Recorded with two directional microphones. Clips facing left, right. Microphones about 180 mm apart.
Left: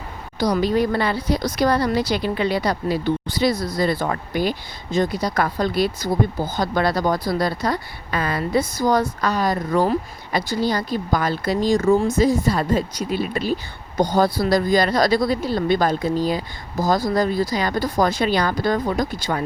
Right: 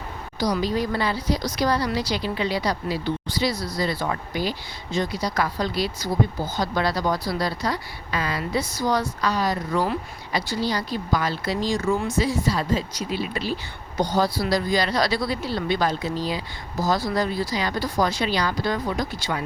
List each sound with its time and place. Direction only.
0.3 s speech: 55° left (ahead or behind)